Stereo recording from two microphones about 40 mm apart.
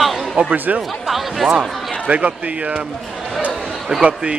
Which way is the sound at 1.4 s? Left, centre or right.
Centre.